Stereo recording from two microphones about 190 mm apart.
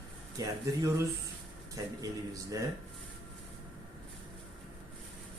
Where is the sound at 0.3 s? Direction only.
15° right (ahead or behind).